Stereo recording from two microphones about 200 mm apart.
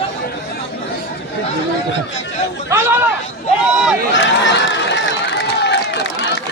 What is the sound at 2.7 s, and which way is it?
Speech, 10° right (ahead or behind).